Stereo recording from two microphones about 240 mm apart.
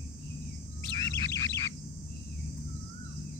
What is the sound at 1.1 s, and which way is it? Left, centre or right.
Bird, centre.